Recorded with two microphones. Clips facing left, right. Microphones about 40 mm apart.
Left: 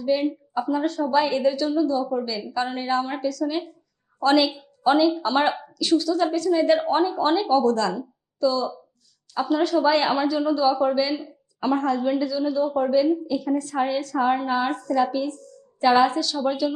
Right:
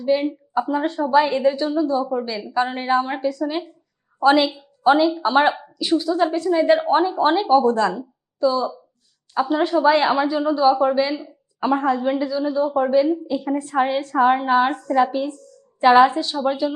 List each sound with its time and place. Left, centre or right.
0.0 s a woman's voice: right